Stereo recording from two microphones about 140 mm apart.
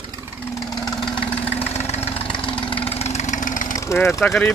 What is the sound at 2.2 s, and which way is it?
Vehicle, 35° left (ahead or behind).